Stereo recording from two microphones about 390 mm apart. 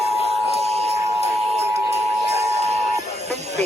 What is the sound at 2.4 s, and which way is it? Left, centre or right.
Music, centre.